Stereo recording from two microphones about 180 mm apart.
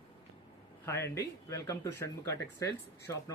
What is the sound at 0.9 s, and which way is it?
Speech, 15° left (ahead or behind).